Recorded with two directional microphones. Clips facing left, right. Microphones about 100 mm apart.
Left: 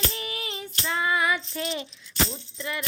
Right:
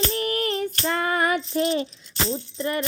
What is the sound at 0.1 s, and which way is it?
Child singing, 50° right (ahead or behind).